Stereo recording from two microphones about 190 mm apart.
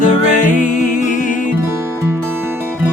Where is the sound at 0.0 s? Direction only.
40° left (ahead or behind).